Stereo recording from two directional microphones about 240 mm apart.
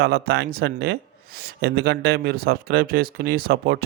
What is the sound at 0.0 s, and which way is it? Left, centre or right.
Speech, right.